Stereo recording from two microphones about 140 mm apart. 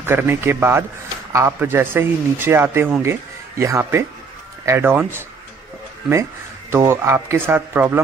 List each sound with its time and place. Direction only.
0.0 s speech: 15° right (ahead or behind)
6.7 s speech: 20° right (ahead or behind)